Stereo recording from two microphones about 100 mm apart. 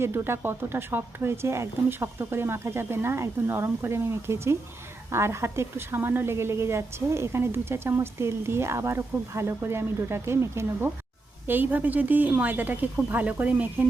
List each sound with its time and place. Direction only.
0.0 s a woman's voice: 25° right (ahead or behind)